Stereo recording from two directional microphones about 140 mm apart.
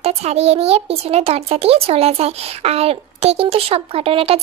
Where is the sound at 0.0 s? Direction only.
50° right (ahead or behind).